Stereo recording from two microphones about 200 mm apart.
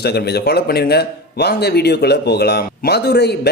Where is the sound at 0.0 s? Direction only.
55° left (ahead or behind).